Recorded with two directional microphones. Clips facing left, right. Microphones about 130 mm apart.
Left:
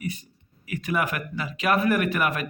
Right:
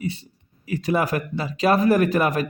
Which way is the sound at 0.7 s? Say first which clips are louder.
Right 5 dB; 30° right (ahead or behind).